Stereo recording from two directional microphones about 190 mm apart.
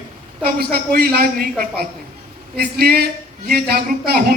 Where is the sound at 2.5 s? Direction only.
55° right (ahead or behind).